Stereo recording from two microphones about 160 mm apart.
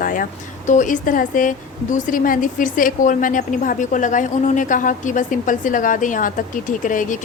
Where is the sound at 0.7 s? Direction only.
55° left (ahead or behind).